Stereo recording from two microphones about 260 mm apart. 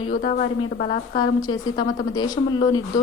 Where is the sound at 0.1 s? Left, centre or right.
Left.